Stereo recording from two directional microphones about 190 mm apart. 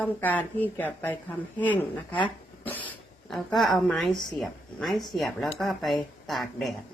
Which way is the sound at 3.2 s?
Centre (ahead or behind).